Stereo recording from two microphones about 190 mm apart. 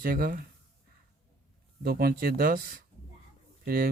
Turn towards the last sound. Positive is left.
turn(degrees=-50)  # may be behind; listen again after turning